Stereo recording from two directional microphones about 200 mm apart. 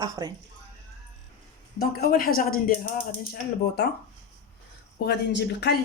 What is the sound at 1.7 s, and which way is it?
Speech, 50° left (ahead or behind).